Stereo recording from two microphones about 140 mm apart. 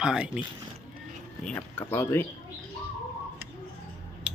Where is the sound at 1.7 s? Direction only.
20° left (ahead or behind).